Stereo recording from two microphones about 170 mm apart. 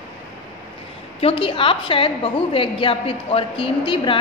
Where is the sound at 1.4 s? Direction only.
30° left (ahead or behind).